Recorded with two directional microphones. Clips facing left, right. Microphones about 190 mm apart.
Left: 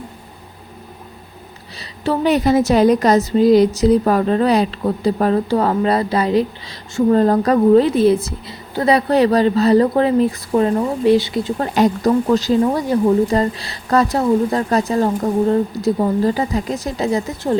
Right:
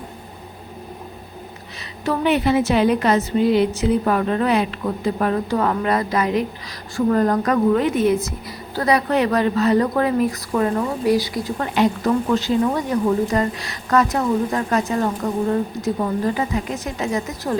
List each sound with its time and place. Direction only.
2.0 s a woman's voice: 40° left (ahead or behind)
11.7 s a woman's voice: 40° left (ahead or behind)